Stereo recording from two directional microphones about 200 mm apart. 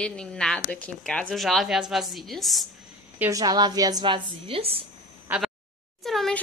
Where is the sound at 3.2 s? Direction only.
15° right (ahead or behind).